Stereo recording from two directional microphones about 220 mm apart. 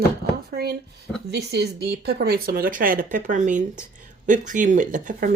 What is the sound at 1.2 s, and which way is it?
Speech, 50° right (ahead or behind).